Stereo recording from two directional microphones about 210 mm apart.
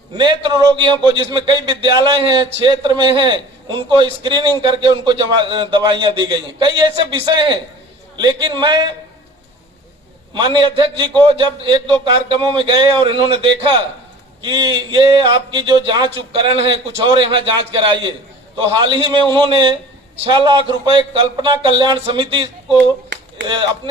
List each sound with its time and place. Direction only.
0.2 s a man's voice: 20° right (ahead or behind)
10.3 s a man's voice: 20° right (ahead or behind)
23.1 s a sound: 55° right (ahead or behind)